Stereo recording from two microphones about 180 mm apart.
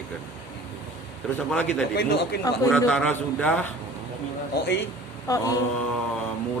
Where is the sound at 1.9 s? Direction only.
60° left (ahead or behind).